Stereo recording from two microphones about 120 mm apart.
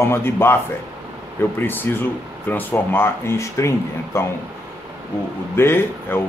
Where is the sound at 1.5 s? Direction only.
15° left (ahead or behind).